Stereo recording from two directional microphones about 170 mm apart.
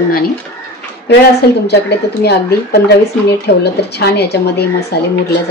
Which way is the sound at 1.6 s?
75° left (ahead or behind).